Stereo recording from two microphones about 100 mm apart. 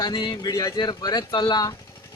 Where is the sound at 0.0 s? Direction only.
50° left (ahead or behind).